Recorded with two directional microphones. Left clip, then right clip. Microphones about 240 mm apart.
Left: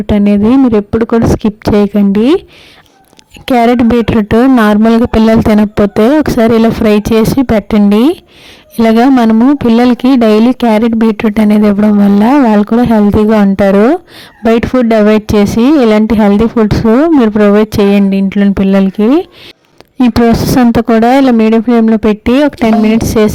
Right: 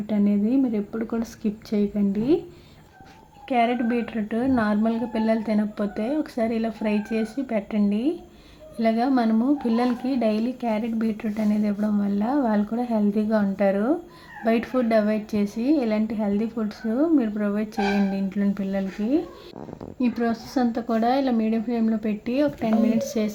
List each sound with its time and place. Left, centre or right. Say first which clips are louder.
0.1 s speech: left 15 dB; left
3.4 s speech: left 14 dB; left
20.0 s speech: left 17 dB; left